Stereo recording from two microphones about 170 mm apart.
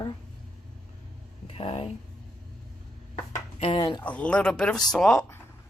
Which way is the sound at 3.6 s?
35° left (ahead or behind).